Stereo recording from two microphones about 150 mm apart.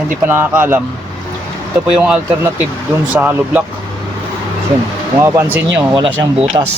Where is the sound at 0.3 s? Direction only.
15° right (ahead or behind).